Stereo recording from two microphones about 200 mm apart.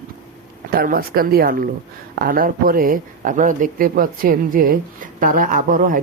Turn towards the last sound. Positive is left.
turn(degrees=-45)  # may be behind; listen again after turning